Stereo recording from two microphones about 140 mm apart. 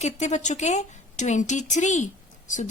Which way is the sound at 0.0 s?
55° left (ahead or behind).